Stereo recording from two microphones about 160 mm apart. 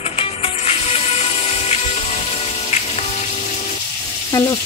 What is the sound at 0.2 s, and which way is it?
Music, 40° left (ahead or behind).